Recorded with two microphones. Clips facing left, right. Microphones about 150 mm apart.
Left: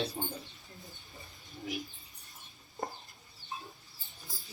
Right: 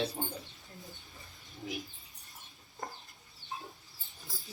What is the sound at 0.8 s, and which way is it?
Bird, centre (ahead or behind).